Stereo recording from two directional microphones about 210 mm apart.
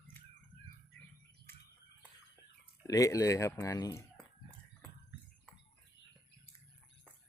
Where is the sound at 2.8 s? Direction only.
15° left (ahead or behind).